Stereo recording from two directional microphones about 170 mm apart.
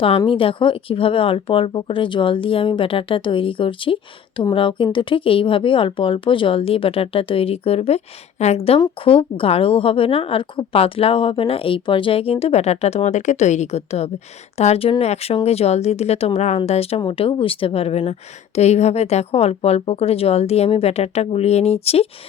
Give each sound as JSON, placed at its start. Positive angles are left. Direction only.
{"t": 0.2, "sound": "a woman's voice", "side_deg": 30}